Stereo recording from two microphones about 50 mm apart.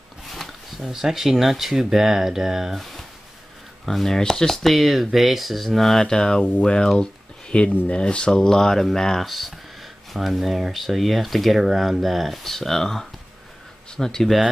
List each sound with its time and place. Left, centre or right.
0.3 s speech: centre
2.8 s a sound: centre
3.8 s speech: centre
4.7 s speech: centre